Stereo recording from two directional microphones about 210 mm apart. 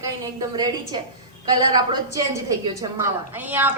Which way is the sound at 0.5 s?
20° right (ahead or behind).